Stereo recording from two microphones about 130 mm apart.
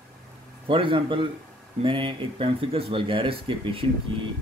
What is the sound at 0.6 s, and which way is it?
A man's voice, 40° right (ahead or behind).